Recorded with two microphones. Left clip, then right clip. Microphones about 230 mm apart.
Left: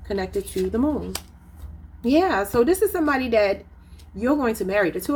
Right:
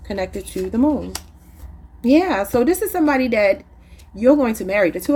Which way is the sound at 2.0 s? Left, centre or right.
Right.